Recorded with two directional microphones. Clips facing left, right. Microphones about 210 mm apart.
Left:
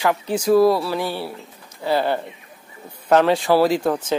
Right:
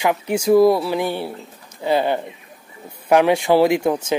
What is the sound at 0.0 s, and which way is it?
Speech, 15° right (ahead or behind).